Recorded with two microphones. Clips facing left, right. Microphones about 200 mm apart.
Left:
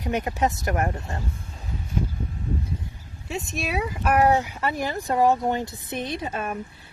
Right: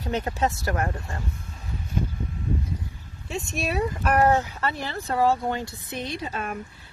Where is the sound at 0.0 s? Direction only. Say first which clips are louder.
Left 1 dB; 15° left (ahead or behind).